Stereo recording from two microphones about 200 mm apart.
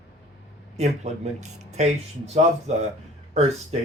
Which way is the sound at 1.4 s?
35° right (ahead or behind).